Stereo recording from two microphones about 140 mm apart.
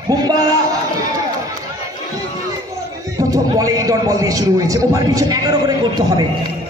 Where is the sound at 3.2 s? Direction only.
25° right (ahead or behind).